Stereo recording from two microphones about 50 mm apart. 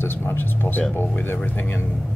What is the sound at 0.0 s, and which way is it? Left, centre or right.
Speech, left.